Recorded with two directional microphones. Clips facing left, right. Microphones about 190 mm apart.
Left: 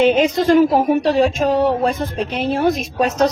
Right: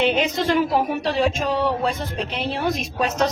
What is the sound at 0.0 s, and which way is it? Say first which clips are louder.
A woman's voice: left 6 dB; 45° left (ahead or behind).